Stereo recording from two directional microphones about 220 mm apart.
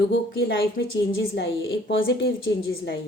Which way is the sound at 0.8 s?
50° left (ahead or behind).